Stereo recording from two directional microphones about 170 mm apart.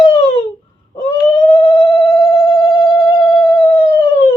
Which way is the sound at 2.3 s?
30° left (ahead or behind).